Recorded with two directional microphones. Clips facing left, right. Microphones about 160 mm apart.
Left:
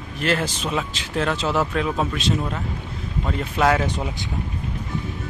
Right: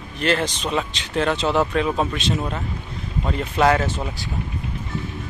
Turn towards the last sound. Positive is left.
turn(degrees=15)  # may be behind; listen again after turning